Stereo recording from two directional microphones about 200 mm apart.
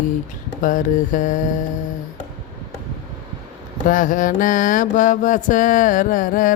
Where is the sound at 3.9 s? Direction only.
40° left (ahead or behind).